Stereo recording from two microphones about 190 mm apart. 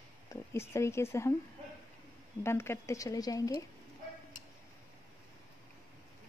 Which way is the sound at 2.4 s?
15° left (ahead or behind).